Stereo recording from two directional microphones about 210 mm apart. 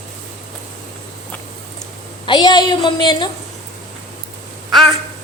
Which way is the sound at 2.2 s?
20° left (ahead or behind).